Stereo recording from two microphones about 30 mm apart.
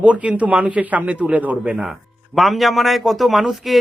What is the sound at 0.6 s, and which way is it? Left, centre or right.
Speech, right.